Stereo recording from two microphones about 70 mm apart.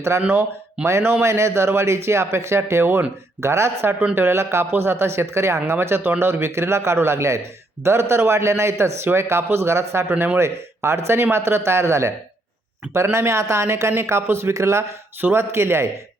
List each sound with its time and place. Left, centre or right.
0.1 s speech: right
15.2 s speech: right